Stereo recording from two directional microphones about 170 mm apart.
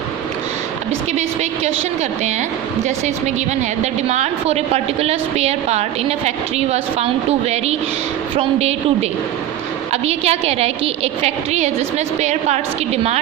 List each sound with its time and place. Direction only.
1.1 s a woman's voice: 40° right (ahead or behind)
4.1 s a woman's voice: 40° right (ahead or behind)